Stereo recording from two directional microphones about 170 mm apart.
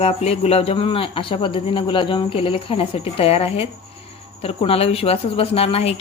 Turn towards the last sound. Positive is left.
turn(degrees=35)  # may be behind; listen again after turning